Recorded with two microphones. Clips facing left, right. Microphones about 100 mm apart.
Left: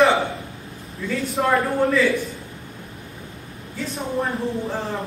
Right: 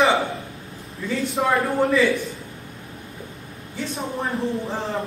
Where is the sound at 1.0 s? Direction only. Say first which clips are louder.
Even; centre (ahead or behind).